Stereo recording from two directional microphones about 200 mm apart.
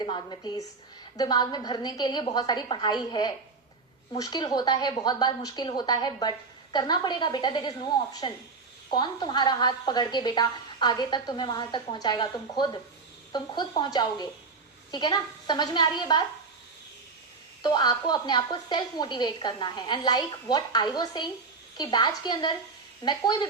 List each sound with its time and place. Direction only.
0.0 s a woman's voice: 25° left (ahead or behind)
17.6 s a woman's voice: 20° left (ahead or behind)